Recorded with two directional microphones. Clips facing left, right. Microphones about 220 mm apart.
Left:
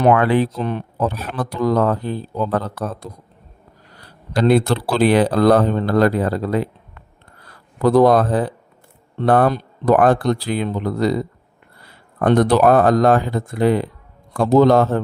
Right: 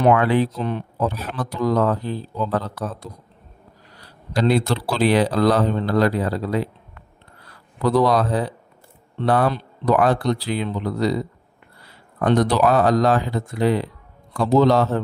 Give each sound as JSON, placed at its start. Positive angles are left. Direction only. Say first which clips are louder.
{"t": 0.0, "sound": "speech", "louder": "left 2 dB", "side_deg": 50}
{"t": 7.8, "sound": "speech", "louder": "left 5 dB", "side_deg": 50}